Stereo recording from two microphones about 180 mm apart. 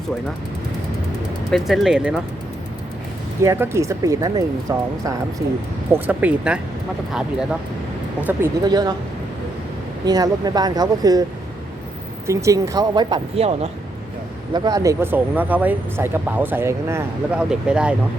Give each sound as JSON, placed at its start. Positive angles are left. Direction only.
{"t": 1.5, "sound": "speech", "side_deg": 0}
{"t": 3.4, "sound": "speech", "side_deg": -15}
{"t": 5.9, "sound": "speech", "side_deg": -10}
{"t": 8.6, "sound": "speech", "side_deg": -20}
{"t": 10.1, "sound": "speech", "side_deg": -20}
{"t": 12.3, "sound": "speech", "side_deg": -15}
{"t": 14.5, "sound": "speech", "side_deg": -20}